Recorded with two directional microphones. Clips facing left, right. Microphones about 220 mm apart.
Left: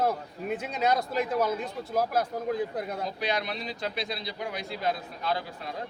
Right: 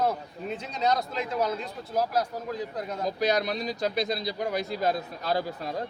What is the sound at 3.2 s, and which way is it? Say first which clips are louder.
Speech: right 7 dB; 40° right (ahead or behind).